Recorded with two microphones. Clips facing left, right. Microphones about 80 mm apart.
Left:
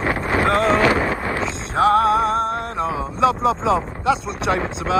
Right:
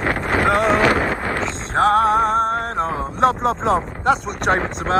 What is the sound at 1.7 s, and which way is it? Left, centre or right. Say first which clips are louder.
Music: even; right.